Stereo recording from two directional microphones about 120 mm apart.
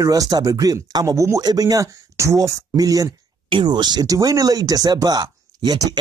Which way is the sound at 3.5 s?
40° right (ahead or behind).